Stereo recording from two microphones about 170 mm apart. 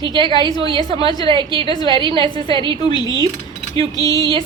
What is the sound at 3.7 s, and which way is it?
Speech, 20° left (ahead or behind).